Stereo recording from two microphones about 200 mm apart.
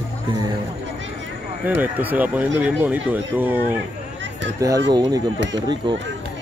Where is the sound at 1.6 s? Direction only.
10° right (ahead or behind).